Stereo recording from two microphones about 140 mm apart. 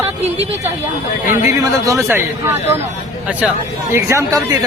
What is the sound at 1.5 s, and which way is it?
A man's voice, 20° right (ahead or behind).